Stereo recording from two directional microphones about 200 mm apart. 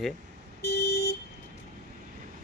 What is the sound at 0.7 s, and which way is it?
Vehicle, 55° left (ahead or behind).